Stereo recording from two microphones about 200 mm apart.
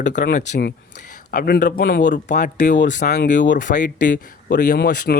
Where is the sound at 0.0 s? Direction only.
40° left (ahead or behind).